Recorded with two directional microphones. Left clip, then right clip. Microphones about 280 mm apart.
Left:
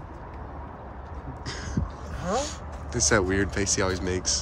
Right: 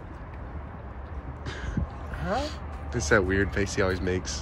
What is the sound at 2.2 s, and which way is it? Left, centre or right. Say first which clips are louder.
Speech: left 2 dB; centre.